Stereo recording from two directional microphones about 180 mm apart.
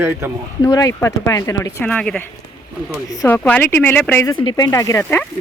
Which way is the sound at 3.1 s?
20° left (ahead or behind).